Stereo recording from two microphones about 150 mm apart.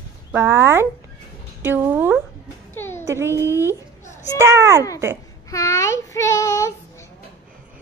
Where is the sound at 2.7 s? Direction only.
15° left (ahead or behind).